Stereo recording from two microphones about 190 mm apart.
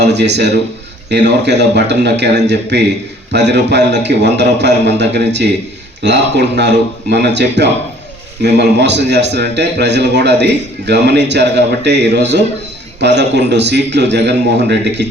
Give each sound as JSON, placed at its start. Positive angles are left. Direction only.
{"t": 0.0, "sound": "a man's voice", "side_deg": -65}